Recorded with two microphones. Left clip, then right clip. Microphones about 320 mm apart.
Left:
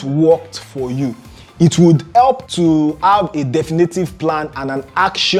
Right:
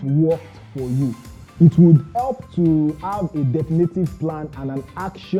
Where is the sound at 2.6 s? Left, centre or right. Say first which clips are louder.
Left 5 dB; left.